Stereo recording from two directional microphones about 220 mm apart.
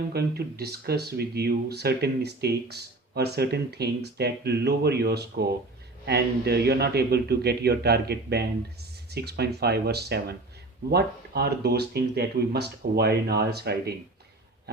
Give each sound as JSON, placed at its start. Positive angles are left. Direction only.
{"t": 0.1, "sound": "speech", "side_deg": -45}